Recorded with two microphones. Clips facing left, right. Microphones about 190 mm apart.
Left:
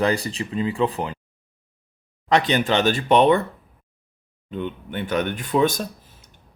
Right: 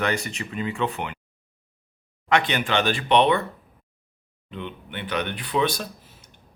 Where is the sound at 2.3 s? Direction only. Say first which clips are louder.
Left 3 dB; 40° left (ahead or behind).